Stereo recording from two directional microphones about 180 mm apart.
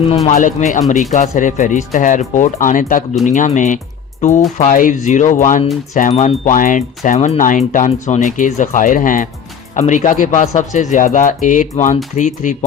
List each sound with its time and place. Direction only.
0.3 s speech: 45° left (ahead or behind)